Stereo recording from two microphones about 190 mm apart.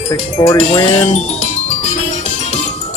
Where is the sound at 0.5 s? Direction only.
35° left (ahead or behind).